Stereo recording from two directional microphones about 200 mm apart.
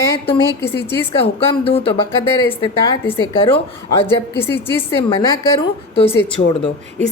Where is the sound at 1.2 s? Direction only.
30° left (ahead or behind).